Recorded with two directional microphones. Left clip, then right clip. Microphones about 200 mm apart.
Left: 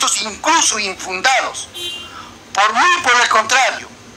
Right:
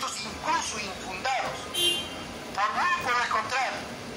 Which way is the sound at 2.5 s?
45° left (ahead or behind).